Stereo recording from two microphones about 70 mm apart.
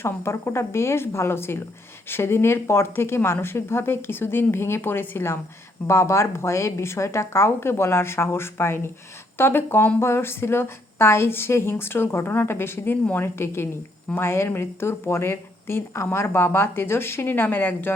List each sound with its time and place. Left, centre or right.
0.0 s a woman's voice: left